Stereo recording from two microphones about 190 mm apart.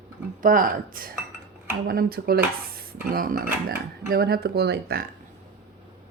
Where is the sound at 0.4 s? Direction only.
45° right (ahead or behind).